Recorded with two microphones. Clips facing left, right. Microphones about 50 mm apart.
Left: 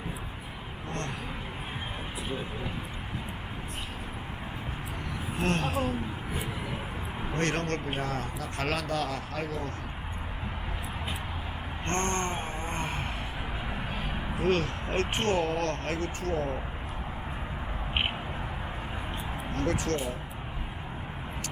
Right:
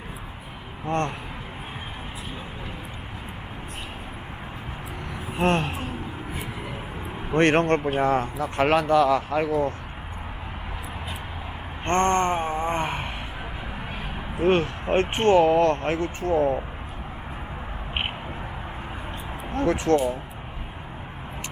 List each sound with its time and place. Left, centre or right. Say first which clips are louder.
0.9 s speech: right 11 dB; right
5.4 s speech: right 5 dB; right
7.3 s speech: right 11 dB; right
11.9 s wail: right 9 dB; right
14.3 s speech: right 7 dB; right
19.5 s speech: right 9 dB; right